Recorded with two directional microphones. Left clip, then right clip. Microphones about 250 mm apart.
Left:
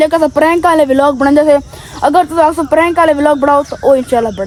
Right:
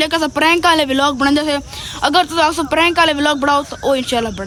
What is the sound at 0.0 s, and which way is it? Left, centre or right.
Speech, centre.